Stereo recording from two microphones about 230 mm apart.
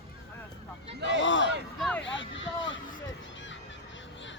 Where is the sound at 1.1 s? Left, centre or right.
Left.